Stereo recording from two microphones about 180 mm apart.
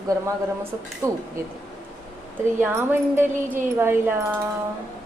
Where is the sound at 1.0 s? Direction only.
15° right (ahead or behind).